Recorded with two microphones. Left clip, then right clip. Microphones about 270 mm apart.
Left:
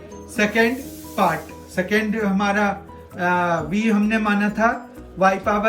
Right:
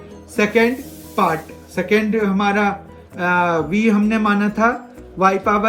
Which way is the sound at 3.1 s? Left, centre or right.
Centre.